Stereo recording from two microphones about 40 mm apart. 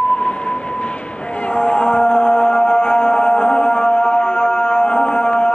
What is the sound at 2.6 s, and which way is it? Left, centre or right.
Music, left.